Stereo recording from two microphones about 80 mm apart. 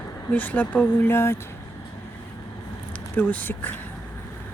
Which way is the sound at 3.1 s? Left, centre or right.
Left.